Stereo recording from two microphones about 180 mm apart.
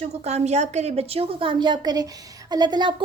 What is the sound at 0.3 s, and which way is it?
A woman's voice, 40° right (ahead or behind).